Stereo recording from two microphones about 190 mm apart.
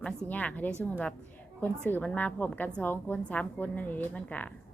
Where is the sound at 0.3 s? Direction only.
10° left (ahead or behind).